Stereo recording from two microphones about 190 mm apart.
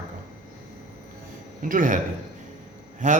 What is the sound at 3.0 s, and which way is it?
Speech, 40° right (ahead or behind).